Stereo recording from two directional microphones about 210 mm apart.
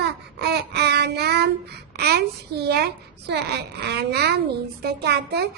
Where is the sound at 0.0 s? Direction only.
50° right (ahead or behind).